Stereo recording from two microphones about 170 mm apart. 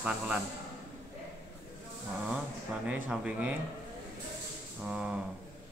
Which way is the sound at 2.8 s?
10° right (ahead or behind).